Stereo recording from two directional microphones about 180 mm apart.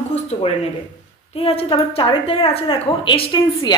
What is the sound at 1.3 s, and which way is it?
A woman's voice, 30° left (ahead or behind).